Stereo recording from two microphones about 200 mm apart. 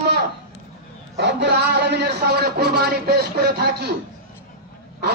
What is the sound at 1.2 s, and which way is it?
A man's voice, 55° right (ahead or behind).